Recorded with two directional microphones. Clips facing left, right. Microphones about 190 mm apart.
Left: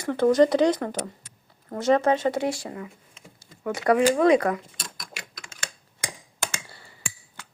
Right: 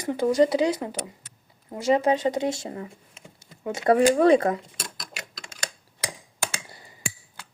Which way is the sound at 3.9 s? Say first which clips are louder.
Right 1 dB; 40° right (ahead or behind).